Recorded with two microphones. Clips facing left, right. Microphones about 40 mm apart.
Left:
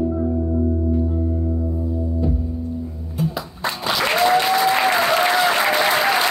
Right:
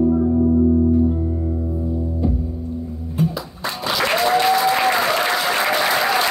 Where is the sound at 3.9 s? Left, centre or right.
Centre.